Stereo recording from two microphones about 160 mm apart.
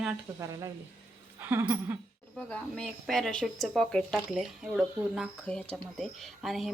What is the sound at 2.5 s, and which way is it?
Speech, 5° left (ahead or behind).